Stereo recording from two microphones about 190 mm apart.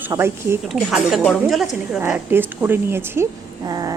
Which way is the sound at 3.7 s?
20° right (ahead or behind).